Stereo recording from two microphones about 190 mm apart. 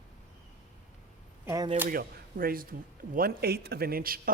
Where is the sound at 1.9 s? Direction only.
50° right (ahead or behind).